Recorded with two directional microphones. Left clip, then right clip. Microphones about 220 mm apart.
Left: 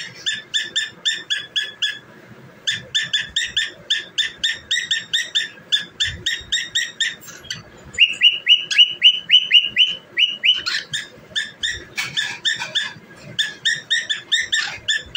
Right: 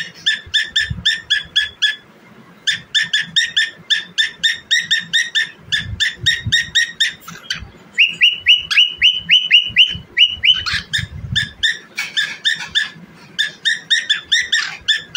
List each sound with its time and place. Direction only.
0.2 s dog: 20° right (ahead or behind)